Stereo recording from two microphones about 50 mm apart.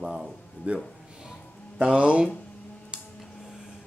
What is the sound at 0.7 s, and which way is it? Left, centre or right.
Speech, right.